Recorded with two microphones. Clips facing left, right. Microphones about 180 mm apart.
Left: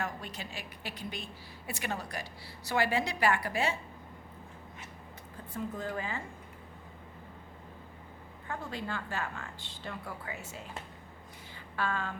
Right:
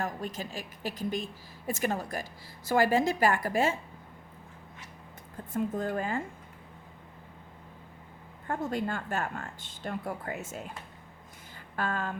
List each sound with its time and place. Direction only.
0.0 s speech: 45° right (ahead or behind)
5.5 s speech: 50° right (ahead or behind)
8.4 s speech: 45° right (ahead or behind)
11.8 s speech: 45° right (ahead or behind)